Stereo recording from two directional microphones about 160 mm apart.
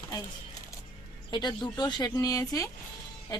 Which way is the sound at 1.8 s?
25° left (ahead or behind).